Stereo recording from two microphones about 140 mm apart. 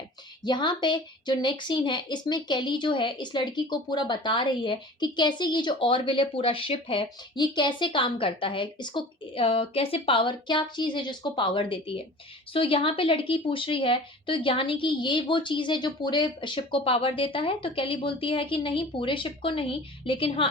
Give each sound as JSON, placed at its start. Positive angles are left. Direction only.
{"t": 0.4, "sound": "a woman's voice", "side_deg": 35}